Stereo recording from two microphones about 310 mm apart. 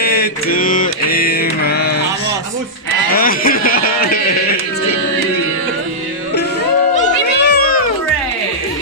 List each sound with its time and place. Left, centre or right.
0.0 s mantra: left
3.2 s a sound: left
7.0 s cat: left